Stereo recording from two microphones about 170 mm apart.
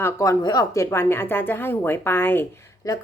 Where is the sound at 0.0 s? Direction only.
20° left (ahead or behind).